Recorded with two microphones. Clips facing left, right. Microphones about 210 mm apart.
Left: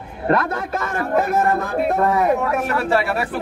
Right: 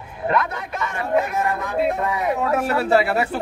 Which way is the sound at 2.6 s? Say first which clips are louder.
Right 1 dB; 25° right (ahead or behind).